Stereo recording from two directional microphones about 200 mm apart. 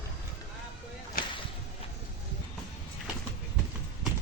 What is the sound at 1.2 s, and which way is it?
Boat, 45° left (ahead or behind).